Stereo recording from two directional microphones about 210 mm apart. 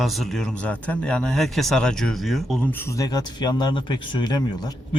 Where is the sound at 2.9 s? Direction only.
20° left (ahead or behind).